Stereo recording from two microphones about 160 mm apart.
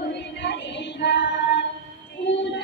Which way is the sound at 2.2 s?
90° left.